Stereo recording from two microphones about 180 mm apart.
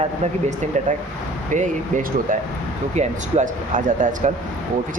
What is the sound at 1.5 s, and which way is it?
Speech, 45° right (ahead or behind).